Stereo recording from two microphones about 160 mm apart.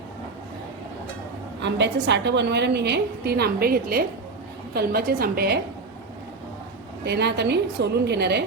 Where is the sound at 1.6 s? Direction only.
90° right.